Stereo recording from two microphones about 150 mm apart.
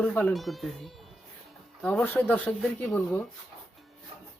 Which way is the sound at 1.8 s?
10° left (ahead or behind).